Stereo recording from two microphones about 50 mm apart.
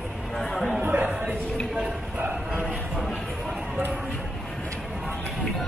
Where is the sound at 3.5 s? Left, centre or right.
Right.